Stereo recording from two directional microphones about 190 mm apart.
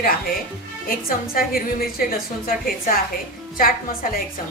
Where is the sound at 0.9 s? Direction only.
50° left (ahead or behind).